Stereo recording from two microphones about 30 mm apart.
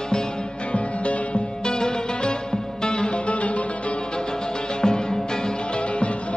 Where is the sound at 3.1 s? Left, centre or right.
Left.